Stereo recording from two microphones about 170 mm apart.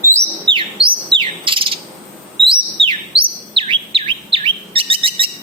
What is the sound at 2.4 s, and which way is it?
Chirp, 30° right (ahead or behind).